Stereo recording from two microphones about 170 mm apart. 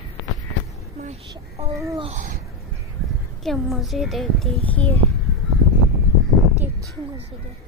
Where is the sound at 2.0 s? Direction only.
45° right (ahead or behind).